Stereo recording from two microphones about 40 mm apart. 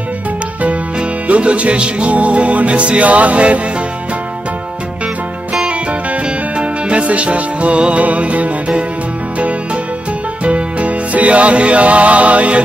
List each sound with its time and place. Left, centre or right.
0.6 s music: right
5.7 s music: right
10.4 s music: right